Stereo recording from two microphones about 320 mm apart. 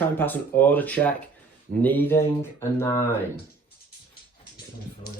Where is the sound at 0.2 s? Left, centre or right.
Centre.